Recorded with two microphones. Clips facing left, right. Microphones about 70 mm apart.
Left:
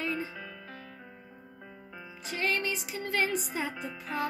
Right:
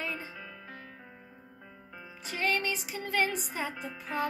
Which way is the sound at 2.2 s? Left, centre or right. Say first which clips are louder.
Even; centre.